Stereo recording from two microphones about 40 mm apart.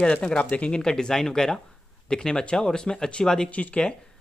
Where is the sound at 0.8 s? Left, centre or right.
Centre.